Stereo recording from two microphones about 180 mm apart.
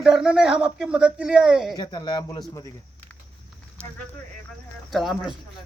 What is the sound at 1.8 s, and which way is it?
Speech, 25° left (ahead or behind).